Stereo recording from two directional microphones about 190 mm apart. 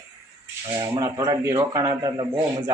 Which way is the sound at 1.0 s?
20° right (ahead or behind).